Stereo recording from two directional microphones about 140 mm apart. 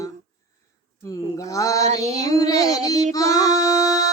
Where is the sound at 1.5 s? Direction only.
25° left (ahead or behind).